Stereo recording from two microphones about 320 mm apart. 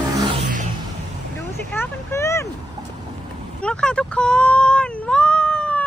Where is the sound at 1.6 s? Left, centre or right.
Centre.